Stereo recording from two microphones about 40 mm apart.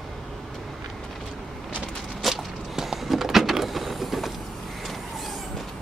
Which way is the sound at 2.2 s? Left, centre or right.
Centre.